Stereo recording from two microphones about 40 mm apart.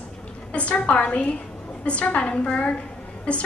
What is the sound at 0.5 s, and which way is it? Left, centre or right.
A woman's voice, left.